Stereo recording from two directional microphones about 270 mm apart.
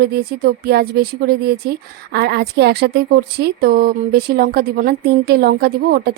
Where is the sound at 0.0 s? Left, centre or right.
Right.